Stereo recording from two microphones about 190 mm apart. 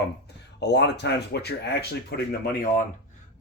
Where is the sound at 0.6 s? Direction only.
60° left (ahead or behind).